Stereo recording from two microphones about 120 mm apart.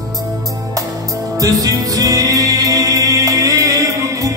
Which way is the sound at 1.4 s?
30° right (ahead or behind).